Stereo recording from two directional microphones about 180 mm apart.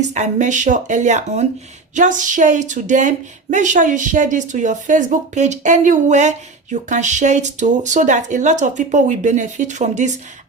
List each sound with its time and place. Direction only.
0.0 s a woman's voice: 40° right (ahead or behind)